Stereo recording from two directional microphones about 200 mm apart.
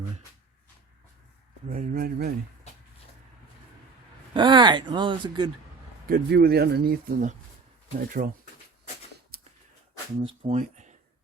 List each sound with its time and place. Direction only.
1.7 s speech: 40° right (ahead or behind)
4.4 s speech: 25° right (ahead or behind)
6.1 s speech: 55° right (ahead or behind)
9.3 s a sound: 45° right (ahead or behind)
10.2 s speech: 30° right (ahead or behind)
10.6 s a sound: 40° right (ahead or behind)